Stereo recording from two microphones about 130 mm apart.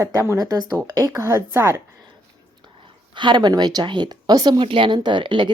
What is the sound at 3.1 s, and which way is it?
Speech, 35° right (ahead or behind).